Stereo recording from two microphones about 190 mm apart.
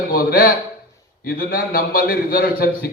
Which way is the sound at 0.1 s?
50° left (ahead or behind).